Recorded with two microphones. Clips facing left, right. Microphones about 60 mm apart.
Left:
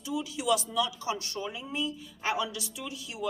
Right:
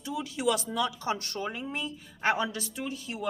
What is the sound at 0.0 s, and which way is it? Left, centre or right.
Speech, right.